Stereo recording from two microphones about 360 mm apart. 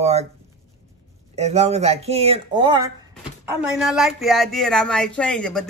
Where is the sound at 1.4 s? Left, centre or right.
Centre.